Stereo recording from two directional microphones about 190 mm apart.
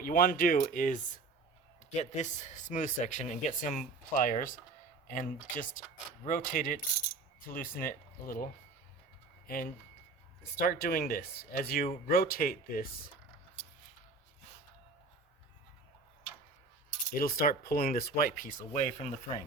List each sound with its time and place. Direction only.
0.0 s speech: 45° left (ahead or behind)
9.5 s speech: 50° left (ahead or behind)
17.2 s speech: 50° left (ahead or behind)